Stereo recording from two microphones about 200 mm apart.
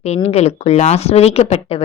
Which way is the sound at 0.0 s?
30° left (ahead or behind).